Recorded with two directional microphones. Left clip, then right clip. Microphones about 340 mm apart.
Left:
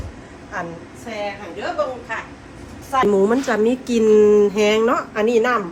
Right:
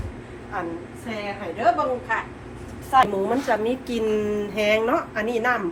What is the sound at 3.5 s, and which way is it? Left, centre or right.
A woman's voice, left.